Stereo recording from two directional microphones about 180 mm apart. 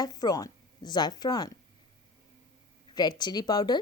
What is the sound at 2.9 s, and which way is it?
Speech, 25° left (ahead or behind).